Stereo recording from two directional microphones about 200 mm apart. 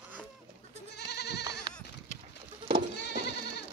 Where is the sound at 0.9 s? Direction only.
55° left (ahead or behind).